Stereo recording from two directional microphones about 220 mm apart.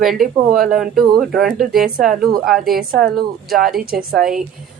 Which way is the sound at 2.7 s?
40° right (ahead or behind).